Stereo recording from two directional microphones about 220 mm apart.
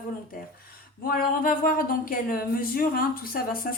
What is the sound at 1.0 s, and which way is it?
A woman's voice, 40° left (ahead or behind).